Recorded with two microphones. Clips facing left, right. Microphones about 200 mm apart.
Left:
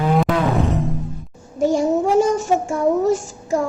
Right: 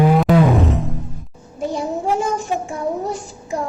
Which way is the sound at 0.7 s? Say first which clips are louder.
Left 1 dB; centre (ahead or behind).